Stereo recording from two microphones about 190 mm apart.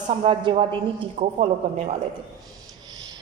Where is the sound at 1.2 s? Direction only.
35° right (ahead or behind).